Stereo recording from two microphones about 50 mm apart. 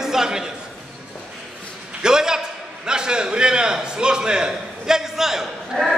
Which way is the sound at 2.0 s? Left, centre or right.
Centre.